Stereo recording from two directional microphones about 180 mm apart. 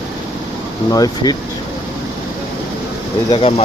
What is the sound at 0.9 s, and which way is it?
Speech, 20° left (ahead or behind).